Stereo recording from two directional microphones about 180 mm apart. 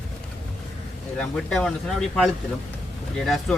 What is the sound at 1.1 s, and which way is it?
Speech, 5° left (ahead or behind).